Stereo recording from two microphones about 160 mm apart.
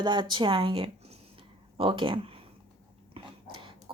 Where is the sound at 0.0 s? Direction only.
30° right (ahead or behind).